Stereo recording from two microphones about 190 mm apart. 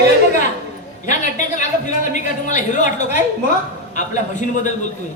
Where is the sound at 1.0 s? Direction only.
40° left (ahead or behind).